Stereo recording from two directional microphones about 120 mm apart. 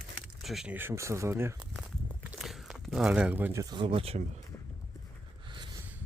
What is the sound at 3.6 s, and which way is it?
Speech, 45° right (ahead or behind).